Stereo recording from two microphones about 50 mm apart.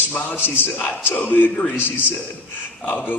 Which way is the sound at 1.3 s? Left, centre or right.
Left.